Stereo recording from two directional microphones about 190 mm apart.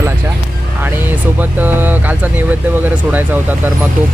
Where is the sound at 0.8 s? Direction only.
10° right (ahead or behind).